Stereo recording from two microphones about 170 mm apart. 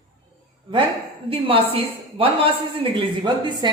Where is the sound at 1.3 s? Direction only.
35° right (ahead or behind).